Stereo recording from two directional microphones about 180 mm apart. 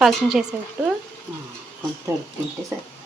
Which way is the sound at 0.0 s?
5° right (ahead or behind).